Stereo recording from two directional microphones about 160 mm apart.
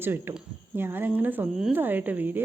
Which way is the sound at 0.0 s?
15° right (ahead or behind).